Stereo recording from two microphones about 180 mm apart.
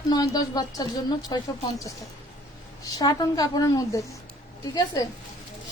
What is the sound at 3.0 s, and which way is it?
Speech, 20° left (ahead or behind).